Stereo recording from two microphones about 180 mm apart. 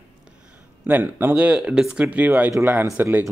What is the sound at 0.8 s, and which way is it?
Speech, 10° right (ahead or behind).